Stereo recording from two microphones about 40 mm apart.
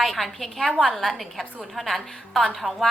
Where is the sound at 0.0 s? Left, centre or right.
Centre.